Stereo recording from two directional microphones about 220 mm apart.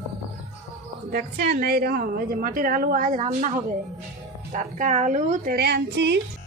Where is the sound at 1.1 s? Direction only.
45° right (ahead or behind).